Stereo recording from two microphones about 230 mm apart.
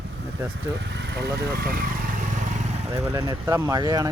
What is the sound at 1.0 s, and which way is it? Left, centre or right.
Speech, right.